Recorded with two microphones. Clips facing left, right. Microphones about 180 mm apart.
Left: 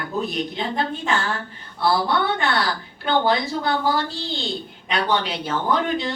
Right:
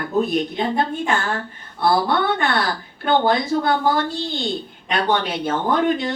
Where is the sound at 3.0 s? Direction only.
50° right (ahead or behind).